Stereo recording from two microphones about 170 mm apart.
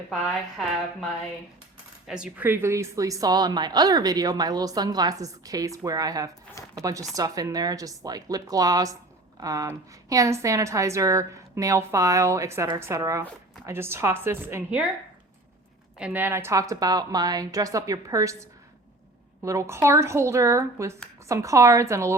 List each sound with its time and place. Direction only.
2.0 s a woman's voice: 5° right (ahead or behind)
16.0 s a woman's voice: 10° right (ahead or behind)